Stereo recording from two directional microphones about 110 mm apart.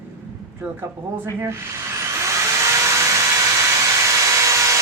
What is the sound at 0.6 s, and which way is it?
Vacuum cleaner, 20° right (ahead or behind).